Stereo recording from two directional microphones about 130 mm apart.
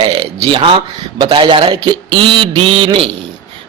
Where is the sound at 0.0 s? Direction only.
40° right (ahead or behind).